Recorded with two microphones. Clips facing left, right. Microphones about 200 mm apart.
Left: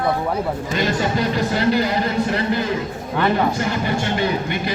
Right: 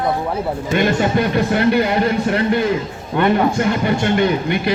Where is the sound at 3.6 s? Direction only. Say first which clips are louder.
Right 4 dB; 55° right (ahead or behind).